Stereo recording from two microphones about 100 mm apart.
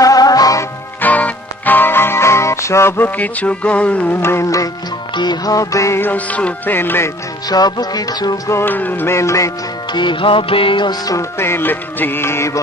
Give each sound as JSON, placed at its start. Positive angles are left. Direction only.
{"t": 0.0, "sound": "music", "side_deg": 40}
{"t": 1.0, "sound": "music", "side_deg": 15}
{"t": 4.2, "sound": "music", "side_deg": 30}
{"t": 5.1, "sound": "music", "side_deg": 45}
{"t": 7.4, "sound": "music", "side_deg": 40}
{"t": 8.5, "sound": "music", "side_deg": 25}
{"t": 9.9, "sound": "music", "side_deg": 55}
{"t": 11.1, "sound": "music", "side_deg": 30}